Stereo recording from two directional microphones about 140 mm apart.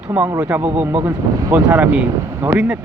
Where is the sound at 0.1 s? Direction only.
10° right (ahead or behind).